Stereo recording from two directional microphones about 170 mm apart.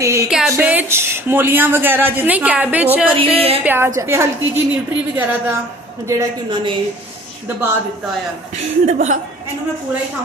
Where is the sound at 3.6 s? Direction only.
10° right (ahead or behind).